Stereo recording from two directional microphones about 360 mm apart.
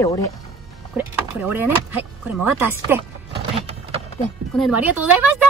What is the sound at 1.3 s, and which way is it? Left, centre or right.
Speech, centre.